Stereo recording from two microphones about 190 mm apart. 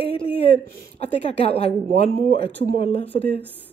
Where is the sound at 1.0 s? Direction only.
35° left (ahead or behind).